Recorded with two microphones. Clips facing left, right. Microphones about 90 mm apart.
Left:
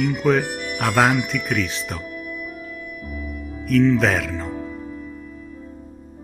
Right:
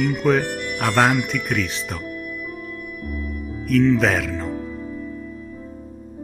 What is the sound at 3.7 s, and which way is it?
Speech, centre (ahead or behind).